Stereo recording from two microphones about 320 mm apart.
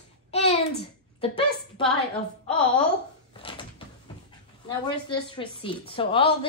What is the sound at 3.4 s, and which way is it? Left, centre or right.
Cupboard open or close, centre.